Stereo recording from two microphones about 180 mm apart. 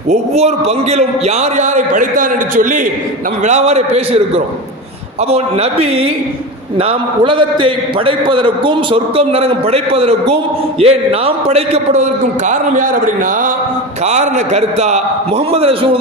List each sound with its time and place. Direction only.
0.1 s a man's voice: 35° right (ahead or behind)
5.3 s a man's voice: 35° right (ahead or behind)